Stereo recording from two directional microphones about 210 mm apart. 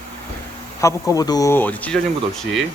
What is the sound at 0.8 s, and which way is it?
Speech, 15° left (ahead or behind).